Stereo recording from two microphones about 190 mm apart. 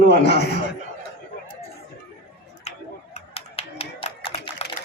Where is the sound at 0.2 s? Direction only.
60° left (ahead or behind).